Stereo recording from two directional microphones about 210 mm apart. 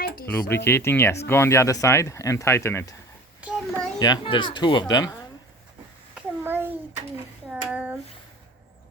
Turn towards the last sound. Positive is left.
turn(degrees=-5)  # may be behind; listen again after turning